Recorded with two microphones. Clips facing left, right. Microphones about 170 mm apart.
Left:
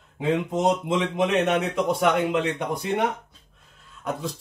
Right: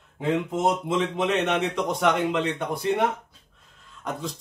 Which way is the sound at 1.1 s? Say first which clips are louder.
Left 5 dB; 10° left (ahead or behind).